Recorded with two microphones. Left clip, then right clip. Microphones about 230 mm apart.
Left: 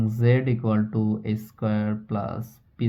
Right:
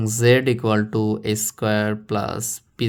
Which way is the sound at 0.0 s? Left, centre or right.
Right.